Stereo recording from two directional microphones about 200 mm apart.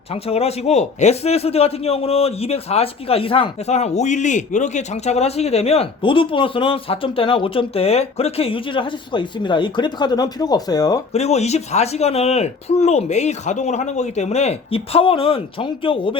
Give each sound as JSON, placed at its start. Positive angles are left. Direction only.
{"t": 0.1, "sound": "a man's voice", "side_deg": 30}
{"t": 11.1, "sound": "speech", "side_deg": 35}